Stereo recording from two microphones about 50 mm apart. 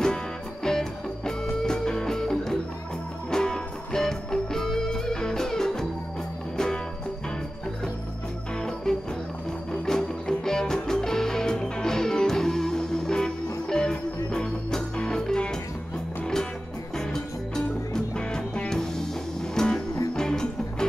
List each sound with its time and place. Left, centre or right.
0.7 s music: centre
8.5 s music: centre
16.9 s music: centre